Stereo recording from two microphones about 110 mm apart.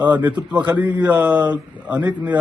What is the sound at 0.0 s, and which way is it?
Speech, 15° right (ahead or behind).